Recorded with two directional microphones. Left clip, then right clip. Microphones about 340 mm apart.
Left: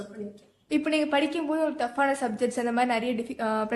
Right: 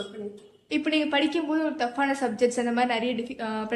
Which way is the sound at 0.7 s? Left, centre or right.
Centre.